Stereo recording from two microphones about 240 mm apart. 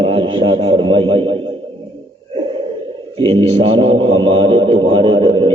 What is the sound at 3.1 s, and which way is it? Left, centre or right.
A man's voice, right.